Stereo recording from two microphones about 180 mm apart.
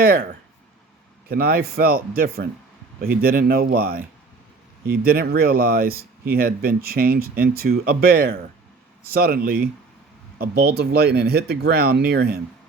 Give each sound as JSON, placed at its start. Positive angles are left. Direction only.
{"t": 0.0, "sound": "speech", "side_deg": -55}